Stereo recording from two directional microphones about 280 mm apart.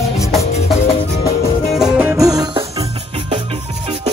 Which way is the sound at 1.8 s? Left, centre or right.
Centre.